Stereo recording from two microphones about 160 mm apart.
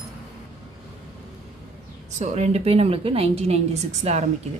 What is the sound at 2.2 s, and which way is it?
A woman's voice, 45° right (ahead or behind).